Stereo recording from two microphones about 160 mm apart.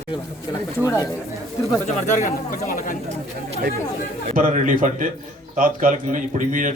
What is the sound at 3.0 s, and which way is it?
Speech, 40° right (ahead or behind).